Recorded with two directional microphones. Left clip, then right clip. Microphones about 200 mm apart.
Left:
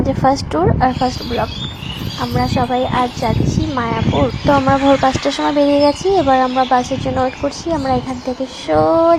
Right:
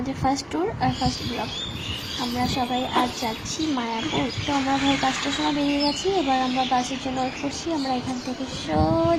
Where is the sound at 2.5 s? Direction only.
15° left (ahead or behind).